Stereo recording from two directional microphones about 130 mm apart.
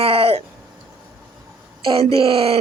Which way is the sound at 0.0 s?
50° right (ahead or behind).